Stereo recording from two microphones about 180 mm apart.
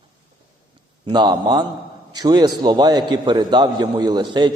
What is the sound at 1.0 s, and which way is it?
A man's voice, 25° right (ahead or behind).